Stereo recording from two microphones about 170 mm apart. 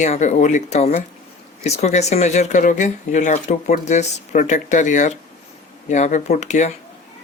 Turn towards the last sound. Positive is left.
turn(degrees=45)  # may be behind; listen again after turning